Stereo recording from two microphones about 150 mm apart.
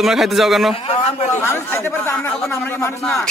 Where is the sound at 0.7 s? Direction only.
45° left (ahead or behind).